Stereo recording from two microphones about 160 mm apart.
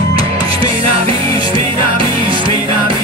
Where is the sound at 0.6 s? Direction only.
35° right (ahead or behind).